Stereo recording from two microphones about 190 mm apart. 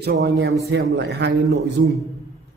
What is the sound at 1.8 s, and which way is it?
Speech, 75° right (ahead or behind).